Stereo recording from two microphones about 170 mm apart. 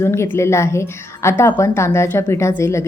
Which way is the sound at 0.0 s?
15° left (ahead or behind).